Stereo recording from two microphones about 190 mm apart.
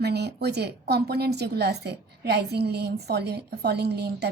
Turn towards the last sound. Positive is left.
turn(degrees=-60)  # may be behind; listen again after turning